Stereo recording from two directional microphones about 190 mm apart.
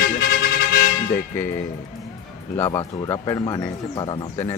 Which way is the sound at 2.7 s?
20° left (ahead or behind).